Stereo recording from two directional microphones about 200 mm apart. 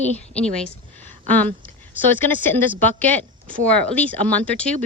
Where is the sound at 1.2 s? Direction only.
5° left (ahead or behind).